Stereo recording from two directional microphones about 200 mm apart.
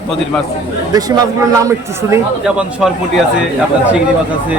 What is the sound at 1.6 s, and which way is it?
Speech, 15° right (ahead or behind).